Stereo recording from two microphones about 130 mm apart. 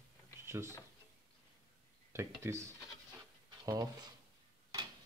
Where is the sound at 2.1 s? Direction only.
20° right (ahead or behind).